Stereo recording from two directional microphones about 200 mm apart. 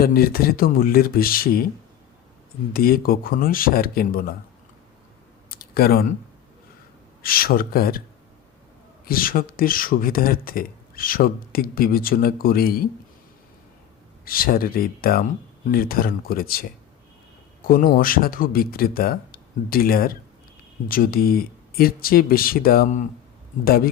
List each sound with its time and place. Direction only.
0.0 s speech: 50° left (ahead or behind)
2.7 s speech: 45° left (ahead or behind)
5.5 s a sound: 50° left (ahead or behind)
7.2 s speech: 45° left (ahead or behind)
9.0 s speech: 45° left (ahead or behind)
14.3 s speech: 45° left (ahead or behind)